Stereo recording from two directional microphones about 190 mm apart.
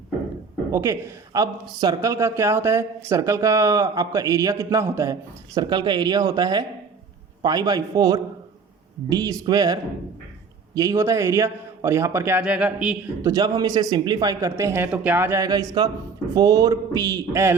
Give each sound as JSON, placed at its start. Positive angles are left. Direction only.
{"t": 0.7, "sound": "speech", "side_deg": -15}
{"t": 13.2, "sound": "speech", "side_deg": -20}